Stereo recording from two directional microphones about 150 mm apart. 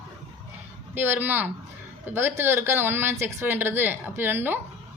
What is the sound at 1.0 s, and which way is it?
Speech, 15° right (ahead or behind).